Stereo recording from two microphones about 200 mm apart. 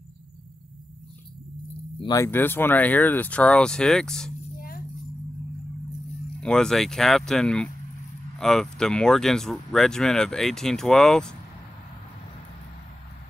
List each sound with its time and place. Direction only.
2.0 s speech: 15° left (ahead or behind)
4.6 s rattle: 45° left (ahead or behind)
6.4 s speech: 5° left (ahead or behind)